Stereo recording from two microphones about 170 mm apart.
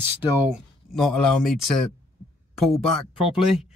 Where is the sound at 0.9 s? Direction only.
Centre (ahead or behind).